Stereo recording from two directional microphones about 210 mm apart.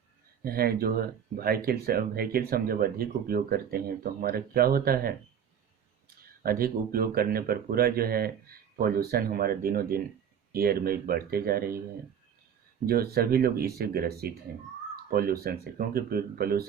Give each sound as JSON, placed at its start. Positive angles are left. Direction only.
{"t": 0.4, "sound": "speech", "side_deg": -45}
{"t": 6.4, "sound": "speech", "side_deg": -45}
{"t": 12.8, "sound": "speech", "side_deg": -45}